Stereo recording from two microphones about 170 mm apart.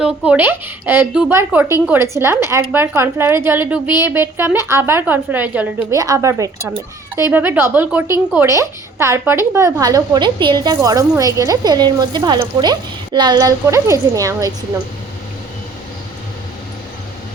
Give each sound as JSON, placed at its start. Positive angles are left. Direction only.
{"t": 0.0, "sound": "speech", "side_deg": -10}